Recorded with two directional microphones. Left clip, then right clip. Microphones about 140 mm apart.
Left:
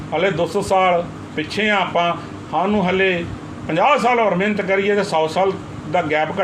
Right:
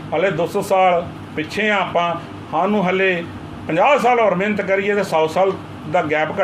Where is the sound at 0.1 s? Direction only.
15° right (ahead or behind).